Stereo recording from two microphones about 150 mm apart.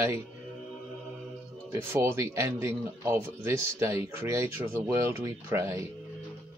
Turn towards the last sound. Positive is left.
turn(degrees=-20)  # may be behind; listen again after turning